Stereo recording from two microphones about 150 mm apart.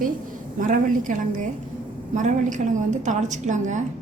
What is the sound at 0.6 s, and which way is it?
A woman's voice, 60° right (ahead or behind).